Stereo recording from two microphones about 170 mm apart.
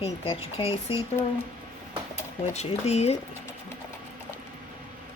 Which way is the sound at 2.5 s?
40° left (ahead or behind).